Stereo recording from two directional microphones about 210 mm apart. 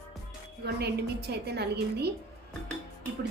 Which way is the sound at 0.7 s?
50° right (ahead or behind).